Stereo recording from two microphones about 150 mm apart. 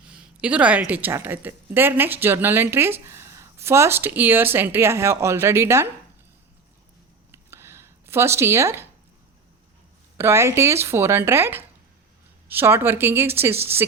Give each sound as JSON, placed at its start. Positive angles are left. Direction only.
{"t": 0.0, "sound": "speech", "side_deg": -10}
{"t": 7.3, "sound": "a sound", "side_deg": -15}
{"t": 10.2, "sound": "speech", "side_deg": -15}